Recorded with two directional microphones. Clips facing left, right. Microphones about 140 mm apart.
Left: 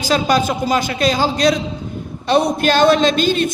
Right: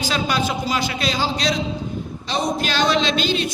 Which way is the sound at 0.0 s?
40° left (ahead or behind).